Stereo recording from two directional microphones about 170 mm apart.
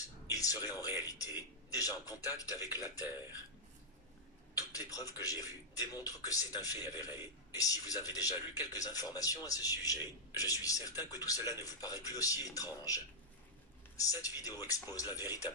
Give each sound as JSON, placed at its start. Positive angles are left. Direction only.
{"t": 0.3, "sound": "speech", "side_deg": 20}
{"t": 4.6, "sound": "a man's voice", "side_deg": 20}
{"t": 13.9, "sound": "speech", "side_deg": 20}